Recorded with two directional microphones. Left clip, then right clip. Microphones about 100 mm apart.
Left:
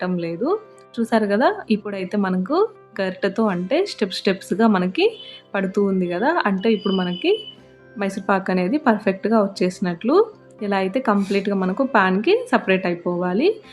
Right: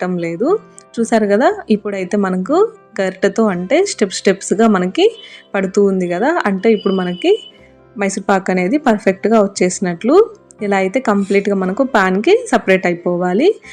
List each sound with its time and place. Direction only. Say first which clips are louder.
0.0 s a woman's voice: right 6 dB; 45° right (ahead or behind)